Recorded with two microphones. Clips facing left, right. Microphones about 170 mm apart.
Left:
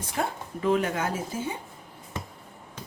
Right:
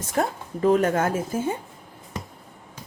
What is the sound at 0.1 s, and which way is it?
Speech, 45° right (ahead or behind).